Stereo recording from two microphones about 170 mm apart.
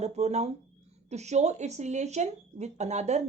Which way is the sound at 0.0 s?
40° right (ahead or behind).